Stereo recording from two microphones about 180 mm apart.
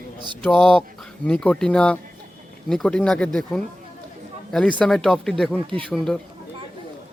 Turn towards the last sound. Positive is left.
turn(degrees=0)  # may be behind; listen again after turning